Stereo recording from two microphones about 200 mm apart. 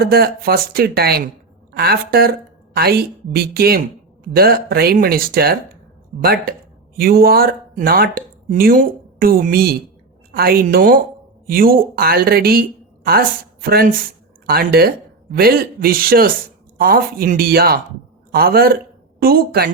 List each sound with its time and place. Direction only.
0.0 s speech: 50° right (ahead or behind)
6.9 s a woman's voice: 50° right (ahead or behind)